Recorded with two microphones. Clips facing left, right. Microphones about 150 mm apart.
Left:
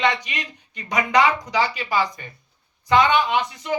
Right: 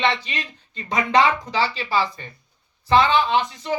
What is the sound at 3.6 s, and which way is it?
Speech, 30° right (ahead or behind).